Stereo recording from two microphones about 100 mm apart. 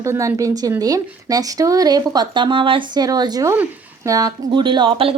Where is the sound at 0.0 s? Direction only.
30° right (ahead or behind); by 3.0 s 60° right (ahead or behind).